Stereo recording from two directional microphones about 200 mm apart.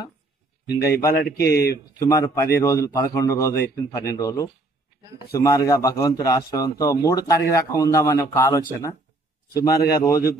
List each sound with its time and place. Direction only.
1.1 s speech: 50° left (ahead or behind)
2.0 s a man's voice: 15° left (ahead or behind)